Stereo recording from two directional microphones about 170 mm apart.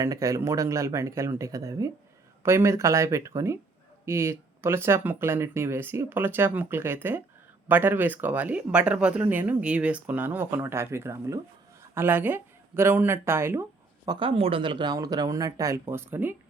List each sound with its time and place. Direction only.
0.0 s speech: 20° right (ahead or behind)